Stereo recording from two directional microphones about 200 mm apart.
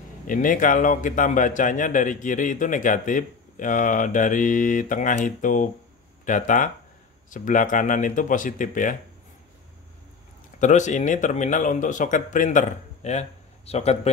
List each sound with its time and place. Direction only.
0.3 s a man's voice: 40° left (ahead or behind)
10.6 s a man's voice: 35° left (ahead or behind)